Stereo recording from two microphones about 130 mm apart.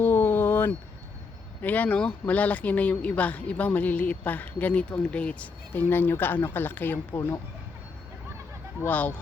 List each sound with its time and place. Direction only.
0.0 s a sound: 15° left (ahead or behind)
1.6 s speech: 10° left (ahead or behind)
8.8 s speech: 10° left (ahead or behind)